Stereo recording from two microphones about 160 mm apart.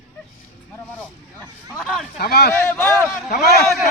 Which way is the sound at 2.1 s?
75° left (ahead or behind).